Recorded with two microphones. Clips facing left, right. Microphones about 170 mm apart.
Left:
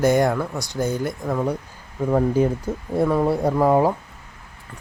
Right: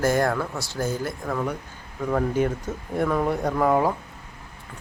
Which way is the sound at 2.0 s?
30° left (ahead or behind).